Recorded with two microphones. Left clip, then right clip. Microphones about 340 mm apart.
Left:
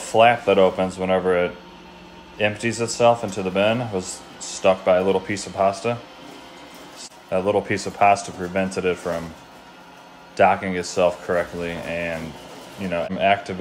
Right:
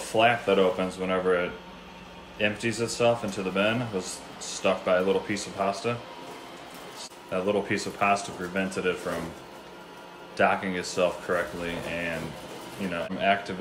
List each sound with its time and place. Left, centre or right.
0.1 s speech: centre
7.0 s speech: centre
10.3 s speech: centre
12.9 s speech: centre